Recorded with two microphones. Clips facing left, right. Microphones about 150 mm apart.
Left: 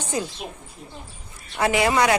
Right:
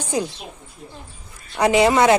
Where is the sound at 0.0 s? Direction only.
15° right (ahead or behind).